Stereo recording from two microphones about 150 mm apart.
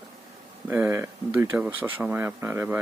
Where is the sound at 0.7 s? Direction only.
15° right (ahead or behind).